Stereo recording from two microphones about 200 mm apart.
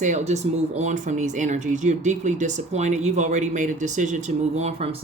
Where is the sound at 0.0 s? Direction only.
40° right (ahead or behind).